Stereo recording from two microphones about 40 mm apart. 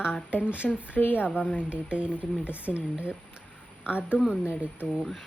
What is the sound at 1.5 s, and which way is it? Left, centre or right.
Speech, right.